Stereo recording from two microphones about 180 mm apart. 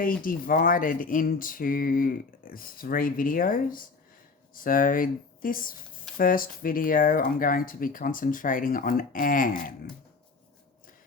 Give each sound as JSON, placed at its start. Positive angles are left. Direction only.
{"t": 0.2, "sound": "speech", "side_deg": 50}